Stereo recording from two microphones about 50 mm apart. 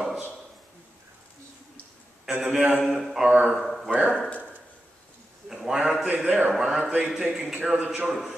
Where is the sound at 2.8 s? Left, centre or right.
Centre.